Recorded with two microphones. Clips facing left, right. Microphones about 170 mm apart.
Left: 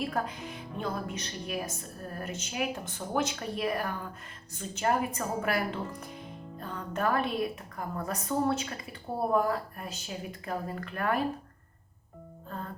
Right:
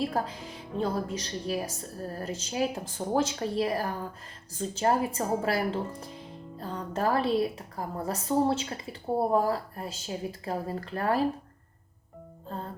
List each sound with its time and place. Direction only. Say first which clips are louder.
0.0 s a woman's voice: right 2 dB; 30° right (ahead or behind)
12.5 s music: right 2 dB; 30° right (ahead or behind)